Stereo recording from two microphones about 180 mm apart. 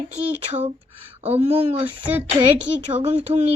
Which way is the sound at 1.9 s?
10° right (ahead or behind).